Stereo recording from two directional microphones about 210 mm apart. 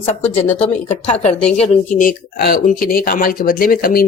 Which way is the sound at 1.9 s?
40° left (ahead or behind).